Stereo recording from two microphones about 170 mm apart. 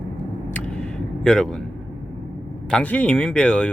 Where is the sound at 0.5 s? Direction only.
5° left (ahead or behind).